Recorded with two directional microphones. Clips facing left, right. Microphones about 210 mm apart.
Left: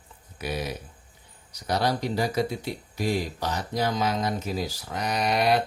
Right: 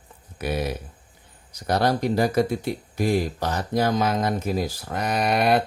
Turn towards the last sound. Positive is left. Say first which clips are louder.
# right 3 dB
turn(degrees=-55)  # may be behind; listen again after turning